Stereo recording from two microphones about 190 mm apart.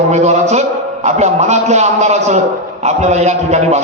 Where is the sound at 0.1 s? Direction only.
35° right (ahead or behind).